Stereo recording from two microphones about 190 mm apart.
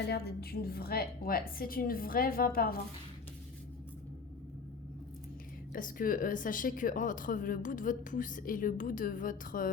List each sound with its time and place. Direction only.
0.1 s speech: 55° left (ahead or behind)
5.7 s speech: 45° left (ahead or behind)